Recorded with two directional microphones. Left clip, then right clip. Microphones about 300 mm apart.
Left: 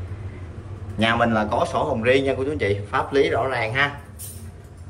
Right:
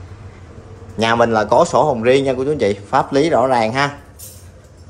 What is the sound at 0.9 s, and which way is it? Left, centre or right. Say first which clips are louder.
Speech: right 6 dB; centre.